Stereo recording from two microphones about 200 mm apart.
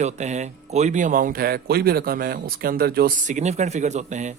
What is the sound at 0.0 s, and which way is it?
Speech, 35° right (ahead or behind).